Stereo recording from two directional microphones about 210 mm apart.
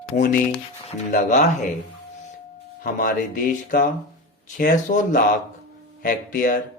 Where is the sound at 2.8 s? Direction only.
40° left (ahead or behind).